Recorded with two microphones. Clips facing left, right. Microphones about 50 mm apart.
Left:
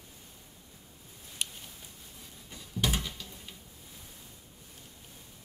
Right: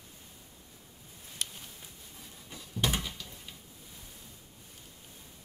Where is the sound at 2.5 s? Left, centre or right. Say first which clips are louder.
Even; centre.